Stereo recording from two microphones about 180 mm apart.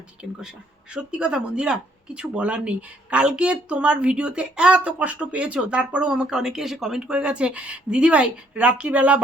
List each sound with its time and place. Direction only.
0.2 s speech: 5° right (ahead or behind)